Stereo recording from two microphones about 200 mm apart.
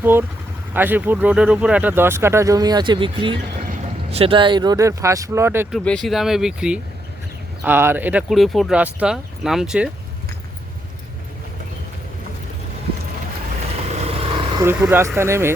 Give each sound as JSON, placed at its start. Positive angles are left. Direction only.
{"t": 0.0, "sound": "speech", "side_deg": -10}
{"t": 5.7, "sound": "speech", "side_deg": 5}
{"t": 13.9, "sound": "vehicle", "side_deg": -30}
{"t": 14.6, "sound": "speech", "side_deg": -10}